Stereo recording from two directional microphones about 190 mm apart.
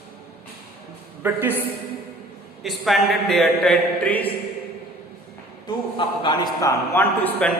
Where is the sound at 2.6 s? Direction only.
Centre (ahead or behind).